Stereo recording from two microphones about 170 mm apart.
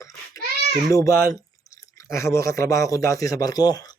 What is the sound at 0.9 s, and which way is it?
Speech, 20° left (ahead or behind).